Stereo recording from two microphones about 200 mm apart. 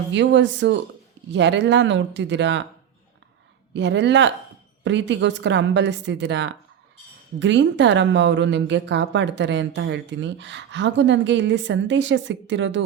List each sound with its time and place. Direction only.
0.1 s a woman's voice: 65° right (ahead or behind)
3.8 s a woman's voice: 60° right (ahead or behind)